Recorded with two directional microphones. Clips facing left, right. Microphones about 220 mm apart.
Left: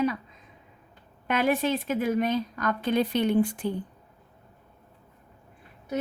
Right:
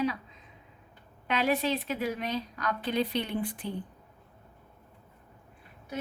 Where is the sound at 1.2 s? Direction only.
50° left (ahead or behind).